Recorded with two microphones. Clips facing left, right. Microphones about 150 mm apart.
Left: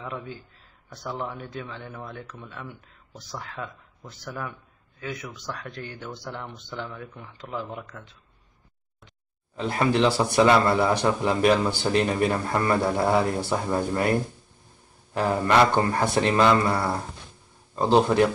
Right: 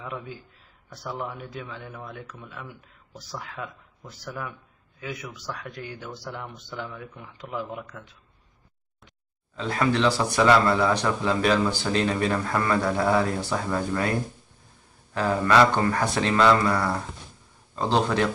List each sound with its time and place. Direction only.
0.0 s speech: 5° right (ahead or behind)
9.7 s speech: 25° left (ahead or behind)
15.1 s speech: 20° left (ahead or behind)
17.7 s speech: 15° left (ahead or behind)